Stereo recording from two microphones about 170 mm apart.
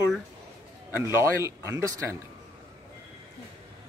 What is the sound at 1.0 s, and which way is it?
Speech, 15° right (ahead or behind).